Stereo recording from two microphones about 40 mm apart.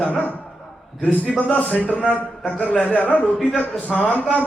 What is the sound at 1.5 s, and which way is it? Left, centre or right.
A man's voice, left.